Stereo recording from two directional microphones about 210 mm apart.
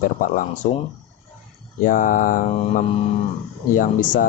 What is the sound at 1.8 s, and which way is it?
Speech, 40° left (ahead or behind).